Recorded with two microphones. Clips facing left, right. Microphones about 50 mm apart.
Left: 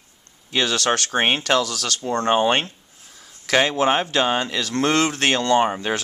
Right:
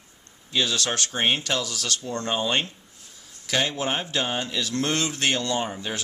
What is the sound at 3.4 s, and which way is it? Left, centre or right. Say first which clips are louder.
Speech: left 7 dB; left.